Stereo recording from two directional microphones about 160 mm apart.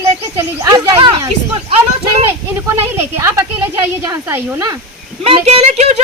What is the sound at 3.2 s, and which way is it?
Speech, 15° right (ahead or behind).